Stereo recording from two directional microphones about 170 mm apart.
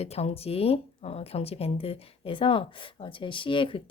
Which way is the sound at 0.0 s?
40° left (ahead or behind).